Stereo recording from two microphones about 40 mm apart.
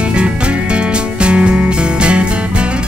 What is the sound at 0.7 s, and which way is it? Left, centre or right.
Music, right.